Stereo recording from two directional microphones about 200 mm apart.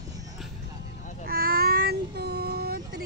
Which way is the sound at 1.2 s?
50° right (ahead or behind).